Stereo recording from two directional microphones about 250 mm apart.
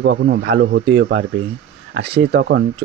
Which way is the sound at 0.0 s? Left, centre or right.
Right.